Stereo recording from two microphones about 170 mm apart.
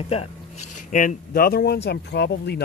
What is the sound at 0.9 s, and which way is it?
Speech, 60° left (ahead or behind).